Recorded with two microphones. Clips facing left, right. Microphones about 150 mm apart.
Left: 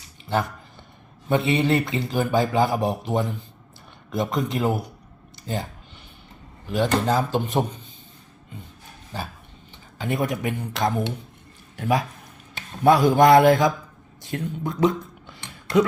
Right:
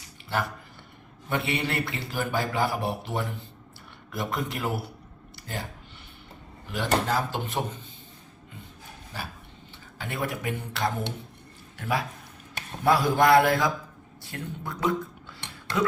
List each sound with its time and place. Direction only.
0.3 s speech: 20° left (ahead or behind)
6.7 s speech: 20° left (ahead or behind)
10.0 s speech: 20° left (ahead or behind)
14.2 s a sound: 20° left (ahead or behind)